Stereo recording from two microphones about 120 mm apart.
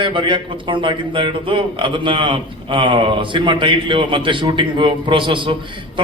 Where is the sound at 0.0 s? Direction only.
45° right (ahead or behind).